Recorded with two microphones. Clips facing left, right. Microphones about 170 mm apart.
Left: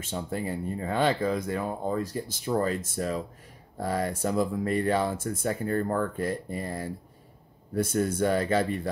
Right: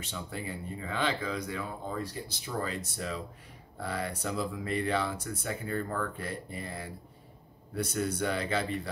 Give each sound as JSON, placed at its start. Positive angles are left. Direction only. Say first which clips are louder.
{"t": 0.0, "sound": "speech", "louder": "left 7 dB", "side_deg": 45}